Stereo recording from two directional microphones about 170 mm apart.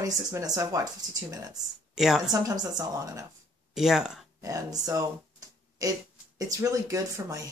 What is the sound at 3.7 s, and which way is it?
Speech, centre (ahead or behind).